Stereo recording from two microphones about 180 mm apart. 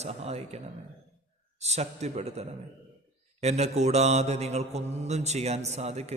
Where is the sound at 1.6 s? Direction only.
35° right (ahead or behind).